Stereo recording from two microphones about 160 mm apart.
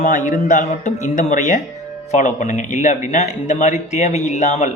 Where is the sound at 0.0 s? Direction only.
55° left (ahead or behind).